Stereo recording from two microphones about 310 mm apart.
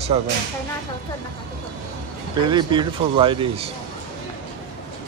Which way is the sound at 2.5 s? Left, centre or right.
Centre.